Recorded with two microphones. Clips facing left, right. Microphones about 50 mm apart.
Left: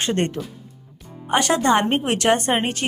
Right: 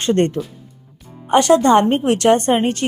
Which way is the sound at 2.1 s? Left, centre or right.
Centre.